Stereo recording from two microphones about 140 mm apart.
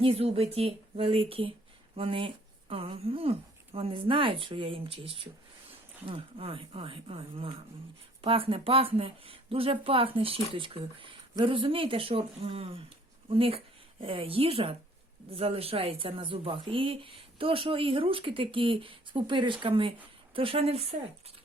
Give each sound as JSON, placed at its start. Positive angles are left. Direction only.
{"t": 0.0, "sound": "a woman's voice", "side_deg": -45}